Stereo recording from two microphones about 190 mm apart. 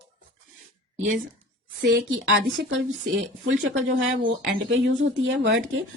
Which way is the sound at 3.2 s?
90° right.